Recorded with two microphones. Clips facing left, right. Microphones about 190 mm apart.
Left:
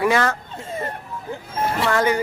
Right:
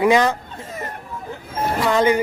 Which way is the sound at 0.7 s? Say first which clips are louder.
Left 4 dB; 30° left (ahead or behind).